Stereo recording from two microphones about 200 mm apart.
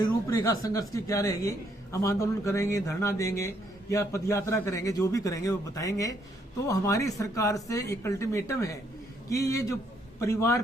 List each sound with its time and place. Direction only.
0.0 s speech: 15° left (ahead or behind)